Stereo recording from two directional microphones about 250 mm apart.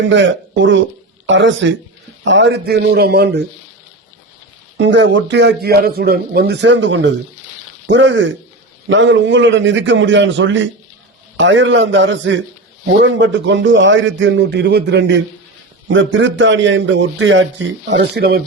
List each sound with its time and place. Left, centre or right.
0.0 s a man's voice: right
4.8 s a man's voice: right